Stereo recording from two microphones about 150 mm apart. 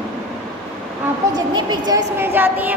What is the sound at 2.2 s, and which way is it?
Speech, 15° right (ahead or behind).